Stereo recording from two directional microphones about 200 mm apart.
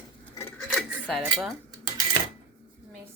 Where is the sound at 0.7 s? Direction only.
Centre (ahead or behind).